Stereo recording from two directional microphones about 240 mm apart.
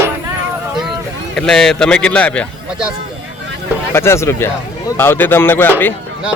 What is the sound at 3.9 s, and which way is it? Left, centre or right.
A man's voice, centre.